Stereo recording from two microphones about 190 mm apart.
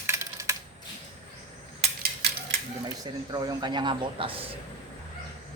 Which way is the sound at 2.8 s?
20° right (ahead or behind).